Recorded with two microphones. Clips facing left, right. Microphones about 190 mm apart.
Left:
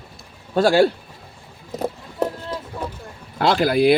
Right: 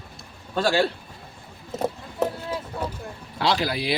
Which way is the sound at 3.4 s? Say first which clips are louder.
Left 8 dB; 50° left (ahead or behind).